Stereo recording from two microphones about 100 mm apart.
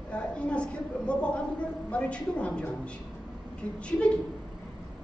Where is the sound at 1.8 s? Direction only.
10° left (ahead or behind).